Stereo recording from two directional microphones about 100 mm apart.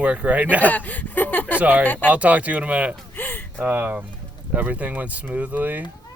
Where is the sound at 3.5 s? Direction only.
20° right (ahead or behind).